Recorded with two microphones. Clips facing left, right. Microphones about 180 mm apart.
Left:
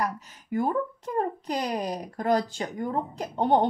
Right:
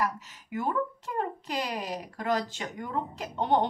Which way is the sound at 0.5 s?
40° left (ahead or behind).